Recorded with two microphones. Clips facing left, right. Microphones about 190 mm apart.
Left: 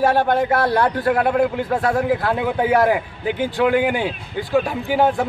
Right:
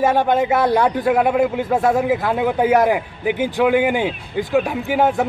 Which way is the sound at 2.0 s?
5° right (ahead or behind).